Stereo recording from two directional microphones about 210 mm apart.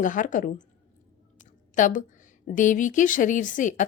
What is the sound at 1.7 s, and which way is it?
A woman's voice, 35° left (ahead or behind).